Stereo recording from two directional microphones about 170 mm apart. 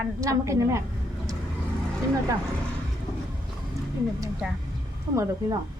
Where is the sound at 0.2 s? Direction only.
20° right (ahead or behind).